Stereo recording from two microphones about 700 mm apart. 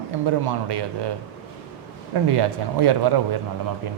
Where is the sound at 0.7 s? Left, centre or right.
Right.